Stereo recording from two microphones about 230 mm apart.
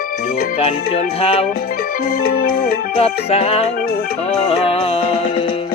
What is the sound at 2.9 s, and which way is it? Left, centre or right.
Music, left.